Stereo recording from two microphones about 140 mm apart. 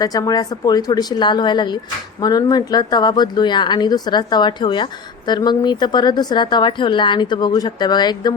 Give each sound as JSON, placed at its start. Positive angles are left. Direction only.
{"t": 0.0, "sound": "speech", "side_deg": 25}